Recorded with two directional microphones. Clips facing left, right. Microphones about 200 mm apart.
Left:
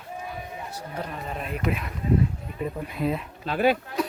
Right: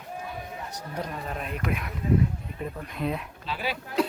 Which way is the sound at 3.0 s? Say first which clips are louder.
Left 3 dB; centre (ahead or behind).